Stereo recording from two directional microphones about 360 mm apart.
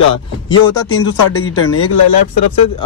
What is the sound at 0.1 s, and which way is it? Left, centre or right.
Speech, centre.